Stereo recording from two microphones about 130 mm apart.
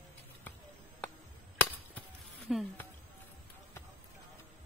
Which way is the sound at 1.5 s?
15° left (ahead or behind).